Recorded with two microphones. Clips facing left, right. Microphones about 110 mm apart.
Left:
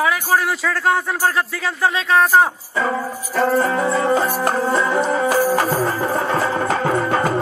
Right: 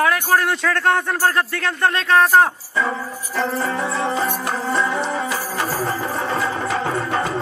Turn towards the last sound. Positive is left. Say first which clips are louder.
# left 4 dB
turn(degrees=50)  # may be behind; listen again after turning